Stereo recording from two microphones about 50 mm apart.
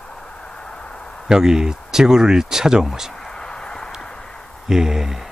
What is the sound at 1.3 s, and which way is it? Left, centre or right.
Speech, centre.